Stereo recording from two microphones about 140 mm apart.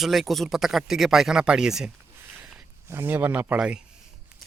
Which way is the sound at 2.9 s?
15° right (ahead or behind).